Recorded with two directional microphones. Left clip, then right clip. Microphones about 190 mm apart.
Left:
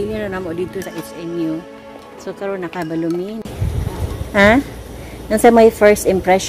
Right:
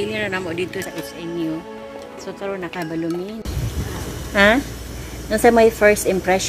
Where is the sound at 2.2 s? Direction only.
65° left (ahead or behind).